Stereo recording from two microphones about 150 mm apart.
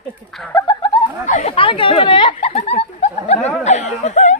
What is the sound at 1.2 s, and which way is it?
Speech, 55° left (ahead or behind).